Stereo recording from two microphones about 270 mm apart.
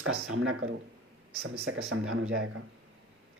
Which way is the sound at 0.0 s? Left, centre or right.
Right.